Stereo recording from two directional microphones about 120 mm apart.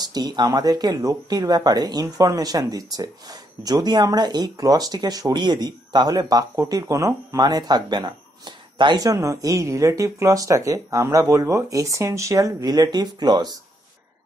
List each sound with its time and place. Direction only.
0.1 s speech: 35° right (ahead or behind)